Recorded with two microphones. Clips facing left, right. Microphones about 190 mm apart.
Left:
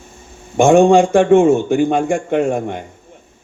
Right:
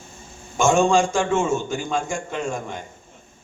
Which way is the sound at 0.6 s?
60° left (ahead or behind).